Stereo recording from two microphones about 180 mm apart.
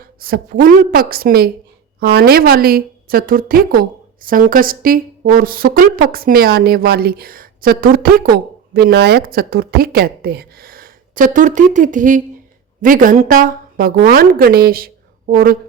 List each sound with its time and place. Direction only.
0.0 s a woman's voice: 55° right (ahead or behind)